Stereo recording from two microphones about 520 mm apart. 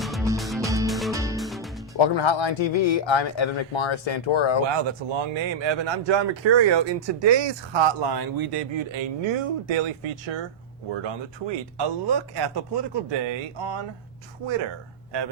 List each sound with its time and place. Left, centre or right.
0.0 s music: centre
2.0 s speech: left
4.6 s speech: right